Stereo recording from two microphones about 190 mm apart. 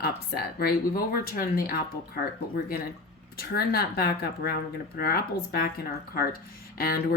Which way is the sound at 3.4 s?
55° left (ahead or behind).